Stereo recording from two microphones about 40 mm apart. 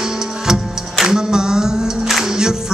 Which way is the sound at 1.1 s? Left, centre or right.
Centre.